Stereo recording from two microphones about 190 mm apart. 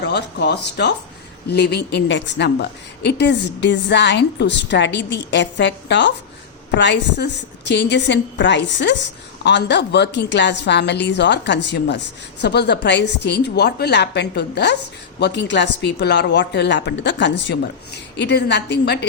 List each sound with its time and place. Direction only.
0.0 s a woman's voice: 65° left (ahead or behind)